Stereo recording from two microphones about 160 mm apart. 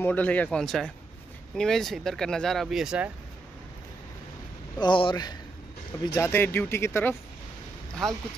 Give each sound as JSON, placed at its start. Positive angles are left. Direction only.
{"t": 0.0, "sound": "speech", "side_deg": 10}
{"t": 4.7, "sound": "speech", "side_deg": 30}